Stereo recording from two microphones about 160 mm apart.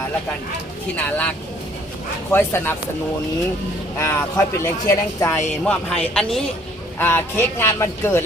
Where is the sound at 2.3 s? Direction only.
15° left (ahead or behind).